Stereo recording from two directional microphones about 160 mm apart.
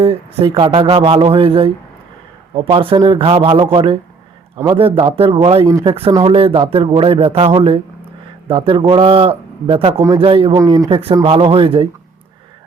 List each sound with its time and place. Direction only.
0.0 s speech: 35° right (ahead or behind)
10.6 s speech: 20° right (ahead or behind)
10.8 s speech: 35° right (ahead or behind)